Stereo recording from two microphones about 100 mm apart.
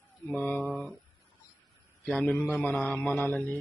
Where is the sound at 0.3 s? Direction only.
15° left (ahead or behind).